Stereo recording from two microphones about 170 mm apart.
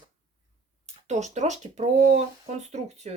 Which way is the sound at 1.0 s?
45° right (ahead or behind).